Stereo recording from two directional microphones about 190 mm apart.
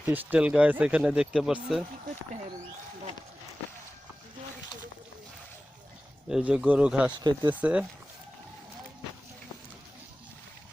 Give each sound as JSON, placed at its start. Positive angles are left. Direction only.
{"t": 0.0, "sound": "speech", "side_deg": -10}
{"t": 6.2, "sound": "speech", "side_deg": -5}